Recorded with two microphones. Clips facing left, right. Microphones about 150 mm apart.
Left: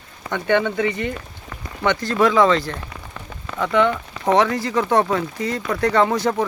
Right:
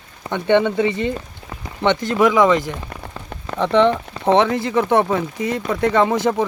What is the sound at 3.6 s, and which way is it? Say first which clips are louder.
Speech: right 3 dB; 30° right (ahead or behind).